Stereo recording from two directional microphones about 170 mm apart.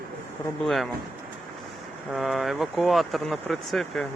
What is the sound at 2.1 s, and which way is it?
Speech, centre (ahead or behind).